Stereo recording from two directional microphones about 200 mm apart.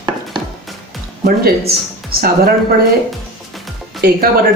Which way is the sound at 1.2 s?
50° right (ahead or behind).